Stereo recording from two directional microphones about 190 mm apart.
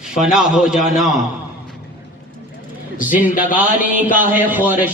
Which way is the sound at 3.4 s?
45° left (ahead or behind).